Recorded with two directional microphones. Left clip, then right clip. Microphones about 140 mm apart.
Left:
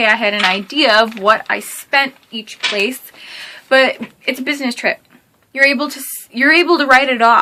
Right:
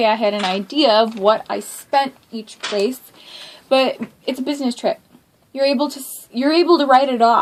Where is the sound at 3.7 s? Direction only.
25° left (ahead or behind).